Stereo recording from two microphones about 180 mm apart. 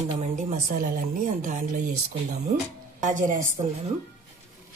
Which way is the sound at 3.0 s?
45° right (ahead or behind).